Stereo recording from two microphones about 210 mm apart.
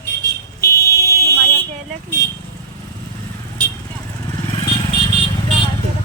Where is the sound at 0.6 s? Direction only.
15° left (ahead or behind).